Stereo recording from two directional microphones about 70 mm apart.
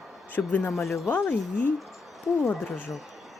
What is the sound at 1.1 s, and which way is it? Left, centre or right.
Speech, left.